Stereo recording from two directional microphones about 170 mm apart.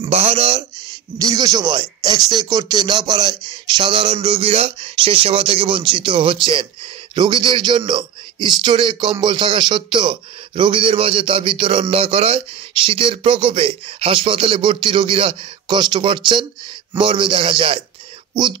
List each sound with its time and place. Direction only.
0.0 s a man's voice: 35° right (ahead or behind)
1.1 s a man's voice: 20° right (ahead or behind)